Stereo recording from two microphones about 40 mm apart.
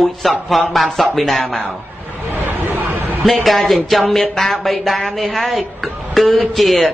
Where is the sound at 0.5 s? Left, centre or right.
Centre.